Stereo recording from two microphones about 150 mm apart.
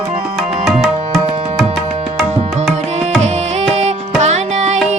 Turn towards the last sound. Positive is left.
turn(degrees=-50)  # may be behind; listen again after turning